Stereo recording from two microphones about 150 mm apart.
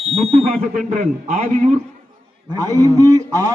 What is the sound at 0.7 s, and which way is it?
A man's voice, 60° right (ahead or behind).